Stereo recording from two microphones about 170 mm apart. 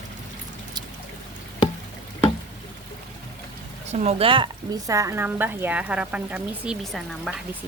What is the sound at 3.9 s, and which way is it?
A woman's voice, 40° right (ahead or behind).